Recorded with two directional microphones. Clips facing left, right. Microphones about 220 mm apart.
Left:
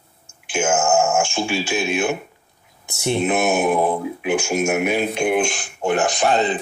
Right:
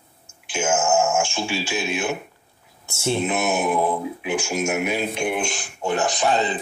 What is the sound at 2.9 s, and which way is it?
Speech, 15° left (ahead or behind).